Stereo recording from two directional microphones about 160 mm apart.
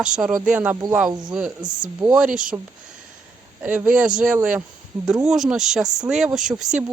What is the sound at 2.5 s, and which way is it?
A man's voice, 20° right (ahead or behind).